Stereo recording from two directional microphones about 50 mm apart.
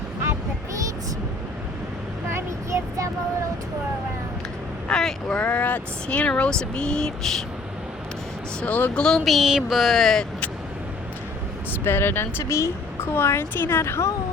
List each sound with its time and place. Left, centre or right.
2.3 s a sound: right
4.9 s speech: centre
5.5 s speech: left; by 7.1 s centre
8.6 s speech: left
9.0 s speech: centre
9.2 s speech: centre
9.5 s a sound: centre
9.7 s speech: centre
11.9 s a woman's voice: left
12.5 s speech: left
13.0 s a woman's voice: left